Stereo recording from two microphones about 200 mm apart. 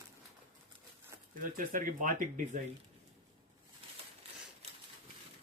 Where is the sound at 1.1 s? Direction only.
10° right (ahead or behind).